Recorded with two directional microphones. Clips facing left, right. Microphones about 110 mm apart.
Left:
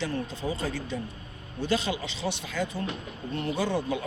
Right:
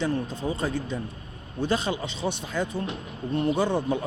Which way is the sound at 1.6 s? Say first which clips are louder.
Right 2 dB; 45° right (ahead or behind).